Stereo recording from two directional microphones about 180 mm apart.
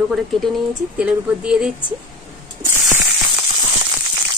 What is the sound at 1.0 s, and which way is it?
Speech, 5° right (ahead or behind).